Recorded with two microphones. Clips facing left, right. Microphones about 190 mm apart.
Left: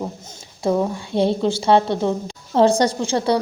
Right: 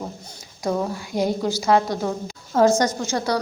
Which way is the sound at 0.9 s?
25° left (ahead or behind).